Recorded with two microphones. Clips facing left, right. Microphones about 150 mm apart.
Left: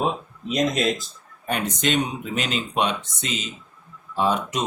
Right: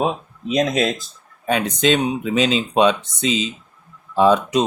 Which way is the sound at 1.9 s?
90° right.